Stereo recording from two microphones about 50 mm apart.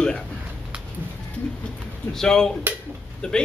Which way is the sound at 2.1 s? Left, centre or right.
Centre.